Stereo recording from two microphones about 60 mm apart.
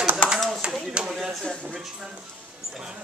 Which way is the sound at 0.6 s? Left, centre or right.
Centre.